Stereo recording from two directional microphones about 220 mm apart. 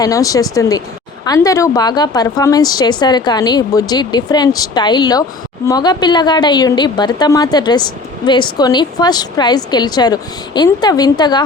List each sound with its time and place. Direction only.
0.0 s a woman's voice: 15° left (ahead or behind)